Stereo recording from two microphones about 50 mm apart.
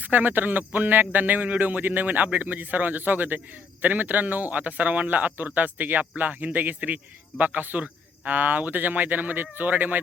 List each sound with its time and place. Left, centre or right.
0.0 s a man's voice: right